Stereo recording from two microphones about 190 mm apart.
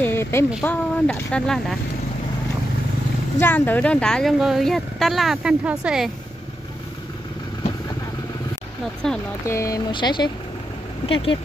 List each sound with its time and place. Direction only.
0.0 s a sound: 10° left (ahead or behind)
0.7 s speech: 5° left (ahead or behind)
3.3 s speech: 10° left (ahead or behind)
9.0 s speech: 5° left (ahead or behind)
9.5 s speech: 15° left (ahead or behind)